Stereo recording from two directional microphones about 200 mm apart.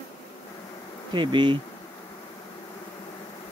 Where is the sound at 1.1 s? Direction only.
25° right (ahead or behind).